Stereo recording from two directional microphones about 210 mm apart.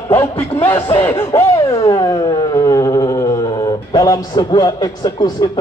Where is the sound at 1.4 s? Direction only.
15° left (ahead or behind).